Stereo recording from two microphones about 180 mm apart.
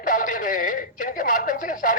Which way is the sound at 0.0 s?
50° left (ahead or behind).